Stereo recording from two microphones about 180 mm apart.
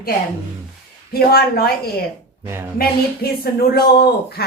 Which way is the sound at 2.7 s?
60° left (ahead or behind).